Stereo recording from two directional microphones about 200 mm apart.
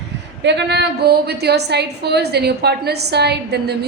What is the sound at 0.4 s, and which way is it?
A woman's voice, 60° right (ahead or behind).